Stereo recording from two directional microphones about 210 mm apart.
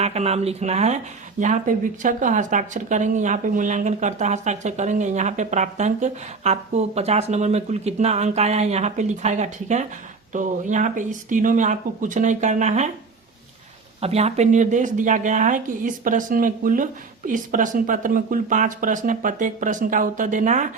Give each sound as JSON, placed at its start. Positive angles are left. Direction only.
{"t": 0.0, "sound": "speech", "side_deg": -30}
{"t": 14.0, "sound": "speech", "side_deg": -30}